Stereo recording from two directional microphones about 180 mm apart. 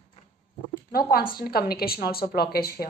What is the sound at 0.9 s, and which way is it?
A woman's voice, 55° left (ahead or behind).